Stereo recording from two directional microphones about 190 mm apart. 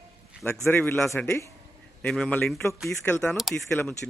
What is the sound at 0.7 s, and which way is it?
Speech, 10° left (ahead or behind).